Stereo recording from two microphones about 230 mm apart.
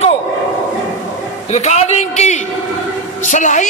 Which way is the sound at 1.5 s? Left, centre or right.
Left.